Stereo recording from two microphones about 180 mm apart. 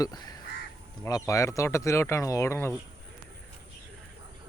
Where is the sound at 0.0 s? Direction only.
20° left (ahead or behind).